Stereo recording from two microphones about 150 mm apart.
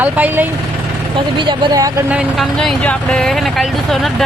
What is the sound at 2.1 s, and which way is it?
Speech, 5° right (ahead or behind).